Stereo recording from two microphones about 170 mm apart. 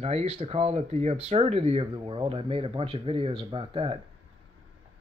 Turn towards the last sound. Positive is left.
turn(degrees=-30)  # may be behind; listen again after turning